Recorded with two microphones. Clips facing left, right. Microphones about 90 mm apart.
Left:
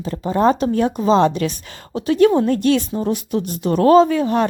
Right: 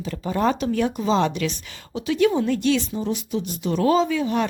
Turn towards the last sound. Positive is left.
turn(degrees=45)  # may be behind; listen again after turning